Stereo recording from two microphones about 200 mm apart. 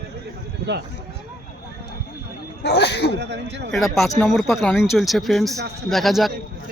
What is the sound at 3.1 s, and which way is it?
Speech, 60° right (ahead or behind).